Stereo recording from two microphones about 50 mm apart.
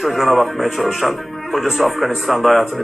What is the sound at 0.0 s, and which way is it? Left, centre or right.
Speech, centre.